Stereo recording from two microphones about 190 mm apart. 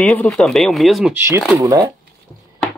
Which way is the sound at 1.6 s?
15° right (ahead or behind).